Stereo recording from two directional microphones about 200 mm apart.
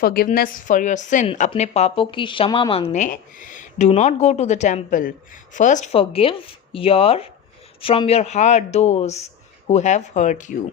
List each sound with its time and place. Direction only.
0.0 s speech: 45° left (ahead or behind)